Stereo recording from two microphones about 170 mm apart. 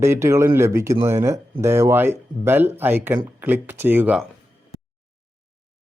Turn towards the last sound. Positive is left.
turn(degrees=-10)  # may be behind; listen again after turning